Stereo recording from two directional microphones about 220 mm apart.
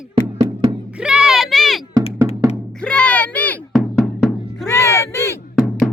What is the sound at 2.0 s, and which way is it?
Music, 25° left (ahead or behind).